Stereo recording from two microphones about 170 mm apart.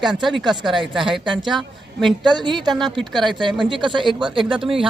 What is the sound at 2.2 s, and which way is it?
Speech, 25° right (ahead or behind).